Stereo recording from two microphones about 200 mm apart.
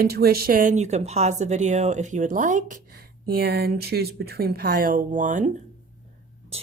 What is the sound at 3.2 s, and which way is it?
Speech, 50° right (ahead or behind).